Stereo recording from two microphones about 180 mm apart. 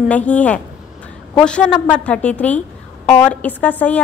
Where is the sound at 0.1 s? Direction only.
10° left (ahead or behind).